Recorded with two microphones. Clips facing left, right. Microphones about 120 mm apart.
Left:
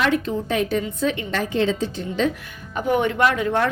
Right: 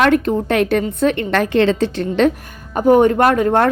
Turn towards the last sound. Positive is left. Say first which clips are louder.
# right 6 dB
turn(degrees=-50)  # may be behind; listen again after turning